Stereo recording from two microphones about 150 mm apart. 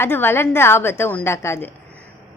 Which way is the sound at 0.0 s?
15° left (ahead or behind).